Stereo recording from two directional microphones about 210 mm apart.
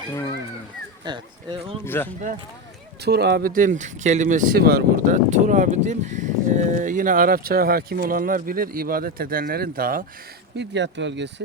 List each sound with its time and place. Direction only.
1.0 s speech: 20° right (ahead or behind)
1.8 s speech: 10° left (ahead or behind)
3.0 s speech: 50° right (ahead or behind)
10.6 s speech: 55° right (ahead or behind)